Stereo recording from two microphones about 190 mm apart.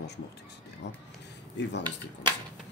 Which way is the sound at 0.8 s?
65° left (ahead or behind).